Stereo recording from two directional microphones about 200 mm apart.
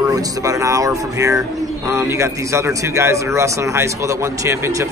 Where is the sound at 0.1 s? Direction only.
15° right (ahead or behind).